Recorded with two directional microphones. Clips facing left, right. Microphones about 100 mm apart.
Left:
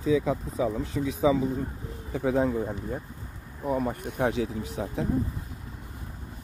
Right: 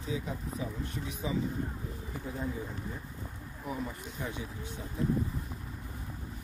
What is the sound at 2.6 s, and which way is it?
Speech, 50° left (ahead or behind).